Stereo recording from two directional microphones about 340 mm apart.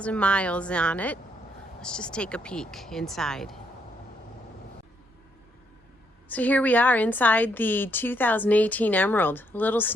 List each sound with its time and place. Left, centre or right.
0.0 s a woman's voice: centre
6.2 s a woman's voice: centre